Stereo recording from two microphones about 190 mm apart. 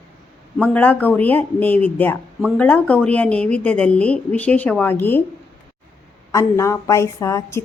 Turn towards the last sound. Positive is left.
turn(degrees=15)  # may be behind; listen again after turning